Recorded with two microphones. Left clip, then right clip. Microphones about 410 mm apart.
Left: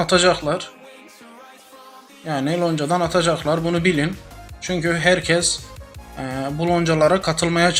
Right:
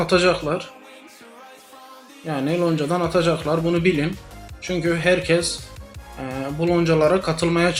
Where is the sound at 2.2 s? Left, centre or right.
Centre.